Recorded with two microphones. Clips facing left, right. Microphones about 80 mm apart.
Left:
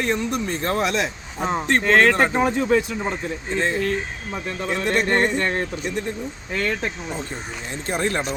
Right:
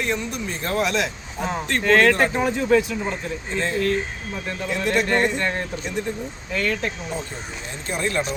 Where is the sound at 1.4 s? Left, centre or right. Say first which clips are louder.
Left 1 dB; left.